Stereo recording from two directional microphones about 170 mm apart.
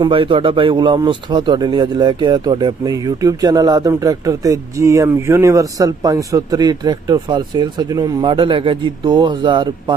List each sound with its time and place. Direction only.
0.0 s speech: 30° right (ahead or behind)